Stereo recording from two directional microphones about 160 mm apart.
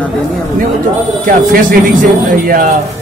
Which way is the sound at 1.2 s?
65° right (ahead or behind).